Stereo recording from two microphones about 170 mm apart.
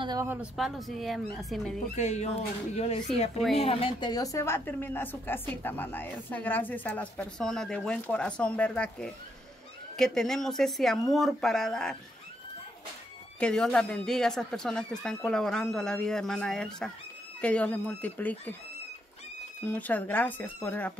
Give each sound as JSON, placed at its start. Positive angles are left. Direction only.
{"t": 0.0, "sound": "speech", "side_deg": -25}
{"t": 0.3, "sound": "speech", "side_deg": -5}
{"t": 2.0, "sound": "a woman's voice", "side_deg": 40}
{"t": 13.4, "sound": "a woman's voice", "side_deg": 5}
{"t": 19.6, "sound": "a woman's voice", "side_deg": 10}